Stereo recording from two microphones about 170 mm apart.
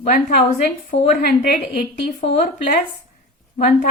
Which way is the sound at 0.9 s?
60° left (ahead or behind).